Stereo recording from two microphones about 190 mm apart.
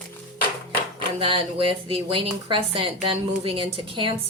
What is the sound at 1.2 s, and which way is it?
Speech, 25° right (ahead or behind).